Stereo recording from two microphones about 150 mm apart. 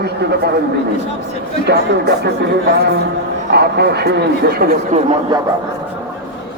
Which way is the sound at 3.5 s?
90° right.